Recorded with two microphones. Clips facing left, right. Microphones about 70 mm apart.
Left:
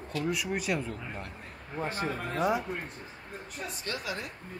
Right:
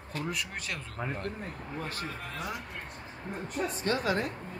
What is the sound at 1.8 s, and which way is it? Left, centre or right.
Speech, left.